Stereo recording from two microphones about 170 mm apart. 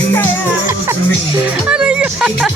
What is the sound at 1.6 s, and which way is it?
Music, 5° right (ahead or behind).